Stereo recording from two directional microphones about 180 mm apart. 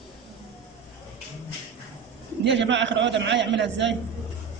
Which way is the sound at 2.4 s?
80° right.